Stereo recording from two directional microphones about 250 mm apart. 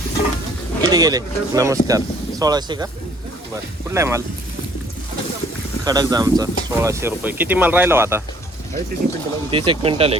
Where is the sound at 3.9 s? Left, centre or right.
Centre.